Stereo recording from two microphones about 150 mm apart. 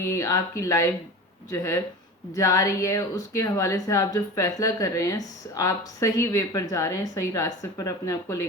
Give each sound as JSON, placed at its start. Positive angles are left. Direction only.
{"t": 0.0, "sound": "speech", "side_deg": 20}